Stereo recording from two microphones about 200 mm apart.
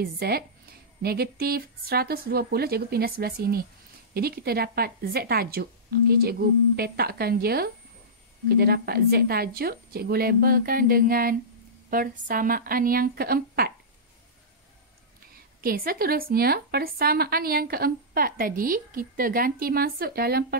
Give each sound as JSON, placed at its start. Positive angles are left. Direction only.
{"t": 0.0, "sound": "a woman's voice", "side_deg": -50}
{"t": 15.6, "sound": "a woman's voice", "side_deg": -45}